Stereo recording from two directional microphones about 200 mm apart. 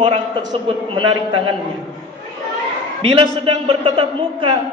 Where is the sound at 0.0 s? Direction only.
25° right (ahead or behind).